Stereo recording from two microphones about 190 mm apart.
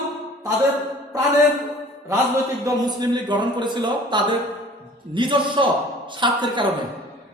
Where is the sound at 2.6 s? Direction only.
20° right (ahead or behind).